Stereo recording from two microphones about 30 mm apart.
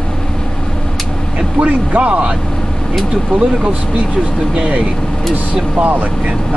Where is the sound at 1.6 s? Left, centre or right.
Right.